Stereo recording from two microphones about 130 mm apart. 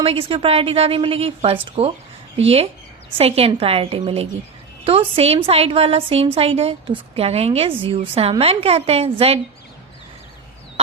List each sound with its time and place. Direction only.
0.0 s a woman's voice: 45° right (ahead or behind)
3.2 s a woman's voice: 50° right (ahead or behind)
10.8 s chicken: 50° right (ahead or behind)